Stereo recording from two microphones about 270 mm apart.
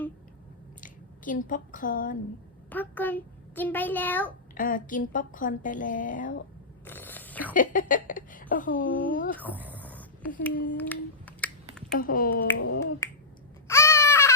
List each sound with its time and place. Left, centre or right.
0.8 s a woman's voice: left
2.6 s a child's voice: centre
4.5 s a woman's voice: left
6.8 s a sound: centre
7.5 s speech: left
9.6 s a sound: centre
11.9 s speech: left
13.7 s baby cry: centre